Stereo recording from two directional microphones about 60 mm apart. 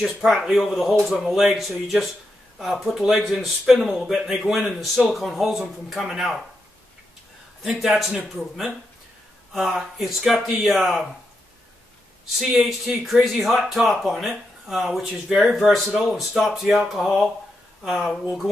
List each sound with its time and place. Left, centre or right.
0.0 s speech: centre
7.6 s speech: centre
9.5 s speech: centre
12.4 s speech: centre